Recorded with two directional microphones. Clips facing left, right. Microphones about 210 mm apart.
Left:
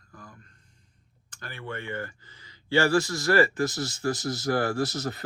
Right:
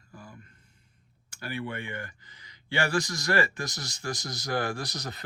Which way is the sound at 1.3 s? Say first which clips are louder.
Right 3 dB; 10° right (ahead or behind).